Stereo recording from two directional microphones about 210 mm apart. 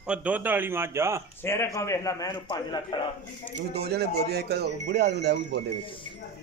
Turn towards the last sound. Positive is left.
turn(degrees=-50)  # may be behind; listen again after turning